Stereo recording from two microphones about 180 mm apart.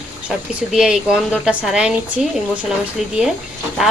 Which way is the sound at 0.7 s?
5° right (ahead or behind).